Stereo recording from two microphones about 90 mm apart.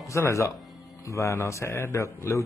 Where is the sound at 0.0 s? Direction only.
35° left (ahead or behind).